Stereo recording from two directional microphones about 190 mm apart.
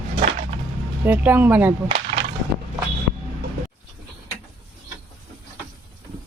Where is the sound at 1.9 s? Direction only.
30° right (ahead or behind).